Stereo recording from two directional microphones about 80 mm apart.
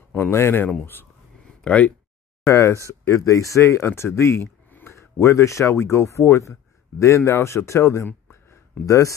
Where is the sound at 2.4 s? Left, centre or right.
Left.